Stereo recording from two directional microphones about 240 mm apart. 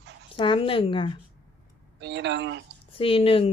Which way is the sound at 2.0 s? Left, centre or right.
Right.